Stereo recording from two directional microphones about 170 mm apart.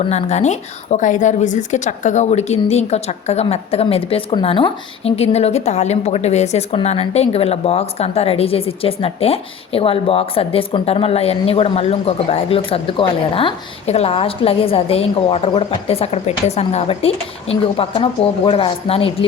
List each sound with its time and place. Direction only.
0.0 s a woman's voice: 35° left (ahead or behind)